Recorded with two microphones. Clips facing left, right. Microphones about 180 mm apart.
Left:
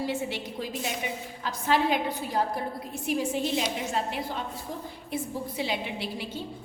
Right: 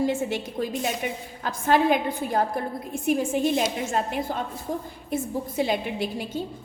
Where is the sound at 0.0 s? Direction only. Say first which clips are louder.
Right 6 dB; 50° right (ahead or behind).